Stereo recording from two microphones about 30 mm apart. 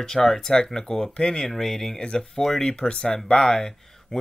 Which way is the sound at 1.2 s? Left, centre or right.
Left.